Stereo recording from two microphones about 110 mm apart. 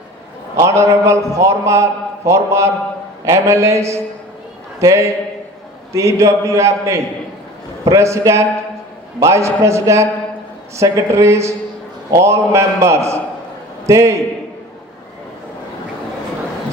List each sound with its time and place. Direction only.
0.5 s a man's voice: 25° right (ahead or behind)